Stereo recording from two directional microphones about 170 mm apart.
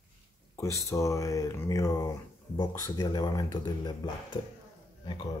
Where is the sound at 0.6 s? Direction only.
20° left (ahead or behind).